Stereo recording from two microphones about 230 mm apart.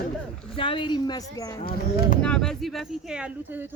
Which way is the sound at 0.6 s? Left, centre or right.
Left.